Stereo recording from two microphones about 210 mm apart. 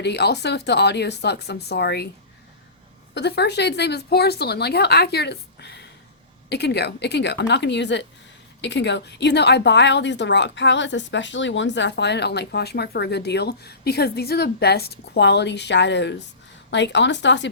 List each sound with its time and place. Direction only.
0.0 s speech: 50° left (ahead or behind)
3.2 s a woman's voice: 55° left (ahead or behind)